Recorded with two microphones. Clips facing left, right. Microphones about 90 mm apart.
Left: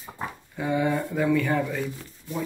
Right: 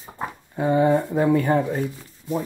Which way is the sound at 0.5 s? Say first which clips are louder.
Right 7 dB; 40° right (ahead or behind).